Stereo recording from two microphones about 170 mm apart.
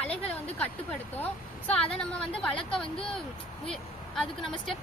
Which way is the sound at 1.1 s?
10° left (ahead or behind).